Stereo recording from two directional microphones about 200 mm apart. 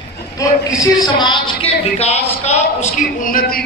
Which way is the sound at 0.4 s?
15° left (ahead or behind).